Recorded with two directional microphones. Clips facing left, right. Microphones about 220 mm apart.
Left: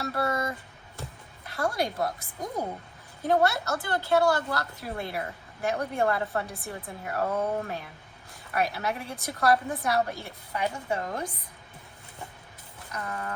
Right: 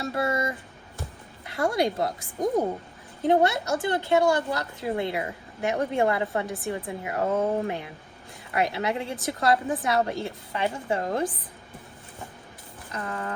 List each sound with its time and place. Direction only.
0.0 s speech: 25° right (ahead or behind)
1.5 s speech: 20° right (ahead or behind)
3.2 s speech: 20° right (ahead or behind)
12.9 s speech: 25° right (ahead or behind)